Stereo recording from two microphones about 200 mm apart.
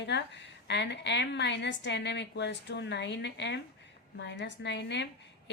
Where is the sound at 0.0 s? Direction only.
60° left (ahead or behind).